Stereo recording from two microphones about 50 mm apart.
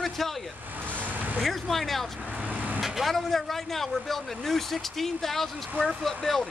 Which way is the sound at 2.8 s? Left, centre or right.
Centre.